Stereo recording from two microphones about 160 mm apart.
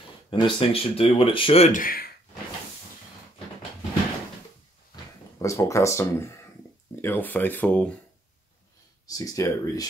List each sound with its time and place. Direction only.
0.3 s speech: 35° left (ahead or behind)
1.7 s speech: 60° left (ahead or behind)
5.4 s speech: 20° left (ahead or behind)
9.0 s speech: 25° left (ahead or behind)